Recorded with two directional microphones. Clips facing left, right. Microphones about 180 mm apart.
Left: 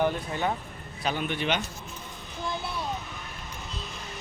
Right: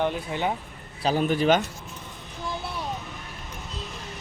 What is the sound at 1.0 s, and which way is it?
Speech, 40° right (ahead or behind).